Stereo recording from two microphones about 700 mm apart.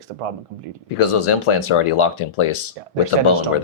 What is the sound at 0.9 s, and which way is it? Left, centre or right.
Speech, left.